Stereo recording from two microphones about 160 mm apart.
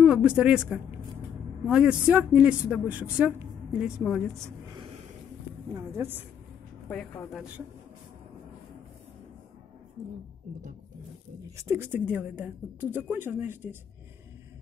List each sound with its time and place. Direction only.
0.0 s a woman's voice: 5° right (ahead or behind)
5.8 s speech: 15° right (ahead or behind)
11.6 s speech: 15° right (ahead or behind)